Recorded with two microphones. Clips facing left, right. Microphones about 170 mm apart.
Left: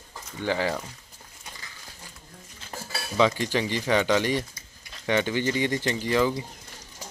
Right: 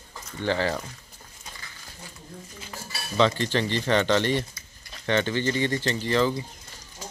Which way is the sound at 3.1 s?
10° left (ahead or behind).